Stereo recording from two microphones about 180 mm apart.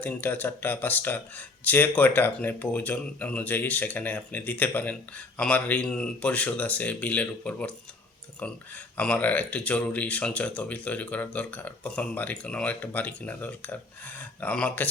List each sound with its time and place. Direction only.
0.0 s speech: 10° left (ahead or behind)
9.0 s speech: 5° left (ahead or behind)